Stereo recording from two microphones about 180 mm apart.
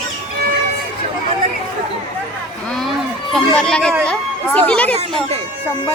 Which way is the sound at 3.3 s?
5° left (ahead or behind).